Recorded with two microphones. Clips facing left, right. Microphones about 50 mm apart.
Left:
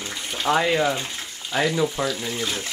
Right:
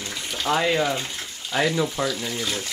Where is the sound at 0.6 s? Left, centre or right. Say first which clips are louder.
Left 1 dB; centre.